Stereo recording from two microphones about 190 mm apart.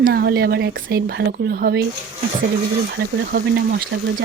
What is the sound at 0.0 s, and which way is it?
Speech, 55° right (ahead or behind).